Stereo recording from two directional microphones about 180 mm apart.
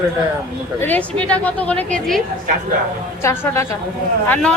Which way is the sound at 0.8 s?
10° left (ahead or behind).